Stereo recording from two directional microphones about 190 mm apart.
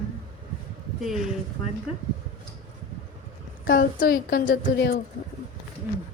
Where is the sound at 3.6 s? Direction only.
50° left (ahead or behind).